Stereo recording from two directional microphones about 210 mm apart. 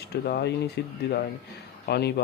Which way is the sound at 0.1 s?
50° left (ahead or behind).